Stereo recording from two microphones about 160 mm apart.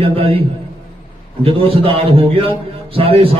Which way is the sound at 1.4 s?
35° right (ahead or behind).